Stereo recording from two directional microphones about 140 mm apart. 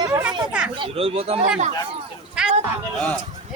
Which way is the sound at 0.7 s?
40° right (ahead or behind).